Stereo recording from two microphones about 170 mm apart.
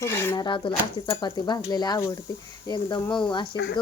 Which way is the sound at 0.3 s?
30° left (ahead or behind).